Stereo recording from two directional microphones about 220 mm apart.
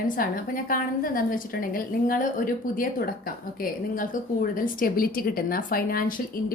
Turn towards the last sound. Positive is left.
turn(degrees=40)  # may be behind; listen again after turning